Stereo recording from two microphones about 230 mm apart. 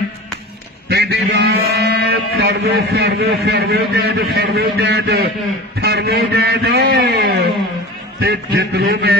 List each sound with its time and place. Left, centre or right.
0.8 s a man's voice: right